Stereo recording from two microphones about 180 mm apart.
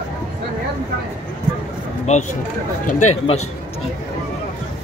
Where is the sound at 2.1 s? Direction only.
40° left (ahead or behind).